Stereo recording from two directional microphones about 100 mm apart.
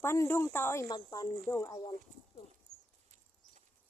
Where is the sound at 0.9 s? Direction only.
40° left (ahead or behind).